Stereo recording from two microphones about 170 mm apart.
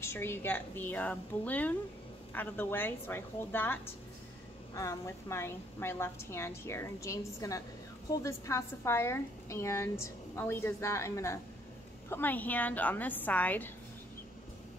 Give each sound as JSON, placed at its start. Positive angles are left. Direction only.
{"t": 0.0, "sound": "a woman's voice", "side_deg": 15}